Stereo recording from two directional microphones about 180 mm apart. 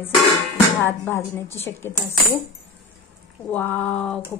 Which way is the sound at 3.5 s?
10° left (ahead or behind).